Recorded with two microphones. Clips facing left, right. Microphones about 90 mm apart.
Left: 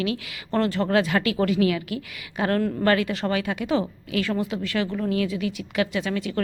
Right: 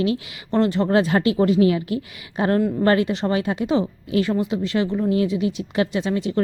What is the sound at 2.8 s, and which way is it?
A woman's voice, 30° right (ahead or behind).